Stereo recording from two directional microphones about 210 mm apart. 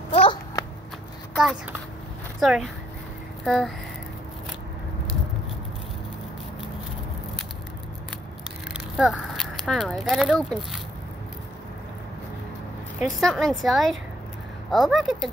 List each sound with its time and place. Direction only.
0.1 s a sound: 25° left (ahead or behind)
1.3 s a woman's voice: centre (ahead or behind)
8.7 s speech: centre (ahead or behind)
13.0 s a woman's voice: centre (ahead or behind)